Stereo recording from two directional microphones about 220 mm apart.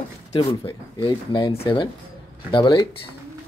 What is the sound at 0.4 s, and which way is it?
Speech, 25° left (ahead or behind).